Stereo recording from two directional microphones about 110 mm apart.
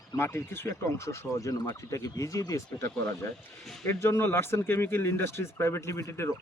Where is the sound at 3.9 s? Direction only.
20° left (ahead or behind).